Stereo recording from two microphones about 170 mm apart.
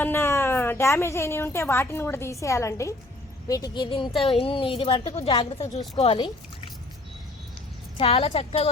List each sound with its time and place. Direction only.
0.0 s a woman's voice: 15° left (ahead or behind); by 6.3 s 30° left (ahead or behind)
7.9 s a woman's voice: 35° left (ahead or behind)